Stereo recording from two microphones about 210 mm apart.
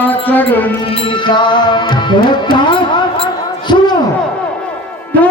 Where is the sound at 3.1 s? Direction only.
25° left (ahead or behind).